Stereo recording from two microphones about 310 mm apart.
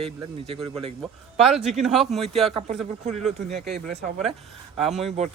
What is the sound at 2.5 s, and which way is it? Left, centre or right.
Speech, centre.